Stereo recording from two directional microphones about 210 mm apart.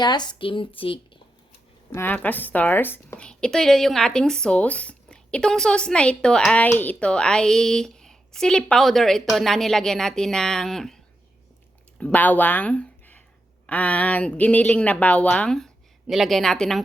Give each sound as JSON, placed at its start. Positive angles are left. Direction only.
{"t": 0.0, "sound": "a woman's voice", "side_deg": 20}
{"t": 1.9, "sound": "a woman's voice", "side_deg": 10}